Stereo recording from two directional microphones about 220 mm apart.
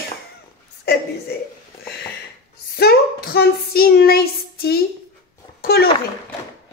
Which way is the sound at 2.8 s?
45° left (ahead or behind).